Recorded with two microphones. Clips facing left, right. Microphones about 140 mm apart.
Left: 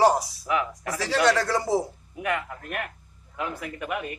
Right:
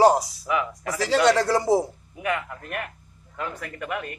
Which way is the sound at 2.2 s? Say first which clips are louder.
Right 1 dB; centre (ahead or behind).